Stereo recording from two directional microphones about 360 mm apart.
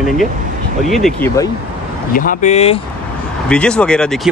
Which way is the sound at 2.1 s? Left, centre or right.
Left.